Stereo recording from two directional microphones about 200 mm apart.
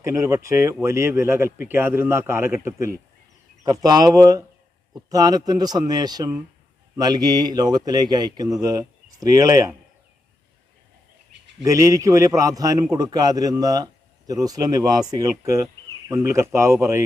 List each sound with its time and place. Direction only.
0.0 s a man's voice: 15° right (ahead or behind)
11.6 s a man's voice: 15° right (ahead or behind)